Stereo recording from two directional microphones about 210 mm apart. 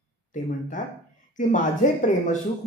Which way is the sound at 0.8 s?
35° left (ahead or behind).